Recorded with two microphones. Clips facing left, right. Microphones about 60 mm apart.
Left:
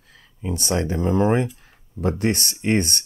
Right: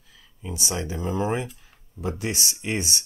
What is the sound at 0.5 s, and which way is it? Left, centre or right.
Speech, left.